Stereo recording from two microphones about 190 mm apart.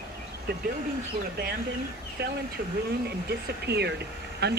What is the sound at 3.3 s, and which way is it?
Speech, 60° right (ahead or behind).